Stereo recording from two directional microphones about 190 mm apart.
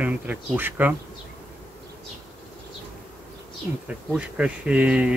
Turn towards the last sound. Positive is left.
turn(degrees=-5)  # may be behind; listen again after turning